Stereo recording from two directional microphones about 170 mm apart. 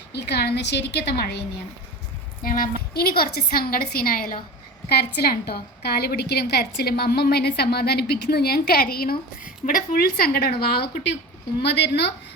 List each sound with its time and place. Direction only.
0.1 s a woman's voice: 75° left (ahead or behind)
2.4 s a sound: 55° left (ahead or behind)
2.9 s a woman's voice: 65° left (ahead or behind)